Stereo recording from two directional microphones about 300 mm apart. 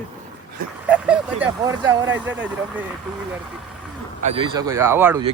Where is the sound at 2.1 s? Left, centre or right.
Right.